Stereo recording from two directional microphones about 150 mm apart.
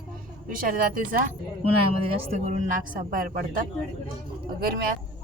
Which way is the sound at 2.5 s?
65° right (ahead or behind).